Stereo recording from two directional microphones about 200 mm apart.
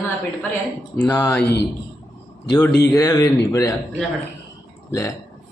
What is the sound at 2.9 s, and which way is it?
Speech, 15° left (ahead or behind).